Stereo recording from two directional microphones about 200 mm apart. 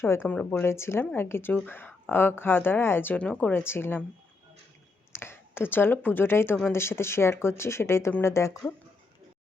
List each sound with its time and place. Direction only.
0.0 s speech: 10° left (ahead or behind)
5.1 s speech: 10° left (ahead or behind)